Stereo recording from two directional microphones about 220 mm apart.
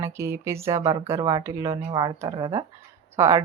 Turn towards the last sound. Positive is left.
turn(degrees=-10)  # may be behind; listen again after turning